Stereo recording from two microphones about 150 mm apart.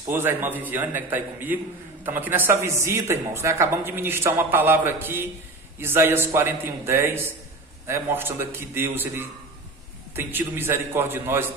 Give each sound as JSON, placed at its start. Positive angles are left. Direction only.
{"t": 0.1, "sound": "speech", "side_deg": -15}